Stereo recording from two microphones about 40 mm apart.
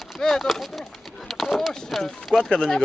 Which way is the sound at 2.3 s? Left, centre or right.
Centre.